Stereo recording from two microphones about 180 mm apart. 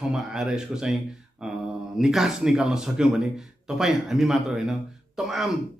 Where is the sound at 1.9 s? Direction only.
Centre (ahead or behind).